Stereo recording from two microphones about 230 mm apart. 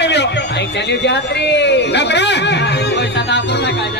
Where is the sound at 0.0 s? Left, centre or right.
Left.